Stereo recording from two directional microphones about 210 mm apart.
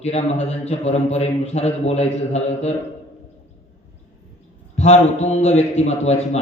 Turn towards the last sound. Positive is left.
turn(degrees=30)  # may be behind; listen again after turning